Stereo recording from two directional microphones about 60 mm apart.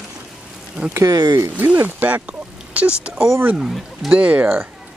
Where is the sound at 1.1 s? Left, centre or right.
Right.